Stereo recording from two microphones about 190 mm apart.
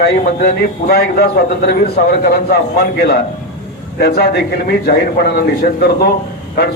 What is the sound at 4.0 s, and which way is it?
A man's voice, 55° left (ahead or behind).